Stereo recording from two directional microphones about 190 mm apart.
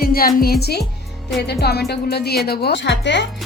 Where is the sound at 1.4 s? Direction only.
60° left (ahead or behind).